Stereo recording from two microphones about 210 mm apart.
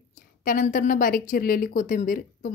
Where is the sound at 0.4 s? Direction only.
40° left (ahead or behind).